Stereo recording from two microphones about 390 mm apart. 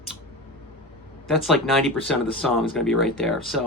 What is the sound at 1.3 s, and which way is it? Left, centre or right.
Speech, centre.